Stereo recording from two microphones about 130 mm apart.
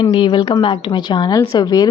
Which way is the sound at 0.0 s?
40° left (ahead or behind).